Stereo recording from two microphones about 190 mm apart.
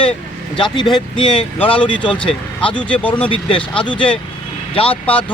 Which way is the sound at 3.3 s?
25° left (ahead or behind).